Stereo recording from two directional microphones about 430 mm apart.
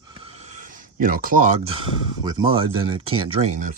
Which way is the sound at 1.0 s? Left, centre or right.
Centre.